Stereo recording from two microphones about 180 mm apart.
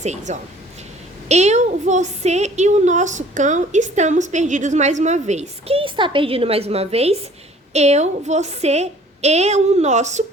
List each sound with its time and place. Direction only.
0.0 s a woman's voice: 40° right (ahead or behind)